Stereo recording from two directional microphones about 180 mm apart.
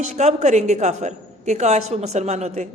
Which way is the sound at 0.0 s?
40° right (ahead or behind).